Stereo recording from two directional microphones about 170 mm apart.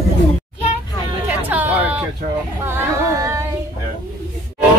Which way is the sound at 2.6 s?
15° right (ahead or behind).